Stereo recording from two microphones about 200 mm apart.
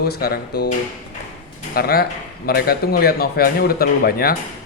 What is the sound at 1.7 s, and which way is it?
Speech, 50° left (ahead or behind).